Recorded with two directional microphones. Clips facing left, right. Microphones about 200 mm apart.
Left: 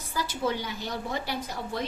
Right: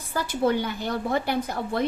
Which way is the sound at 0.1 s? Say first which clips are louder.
Right 6 dB; 55° right (ahead or behind).